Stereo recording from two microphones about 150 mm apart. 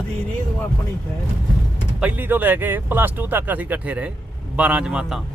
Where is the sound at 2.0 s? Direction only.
10° right (ahead or behind).